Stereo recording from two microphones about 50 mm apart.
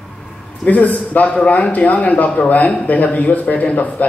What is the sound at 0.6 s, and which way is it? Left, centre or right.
A man's voice, left.